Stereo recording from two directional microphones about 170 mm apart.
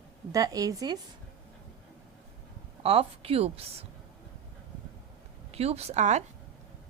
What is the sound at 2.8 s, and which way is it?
Speech, 35° right (ahead or behind).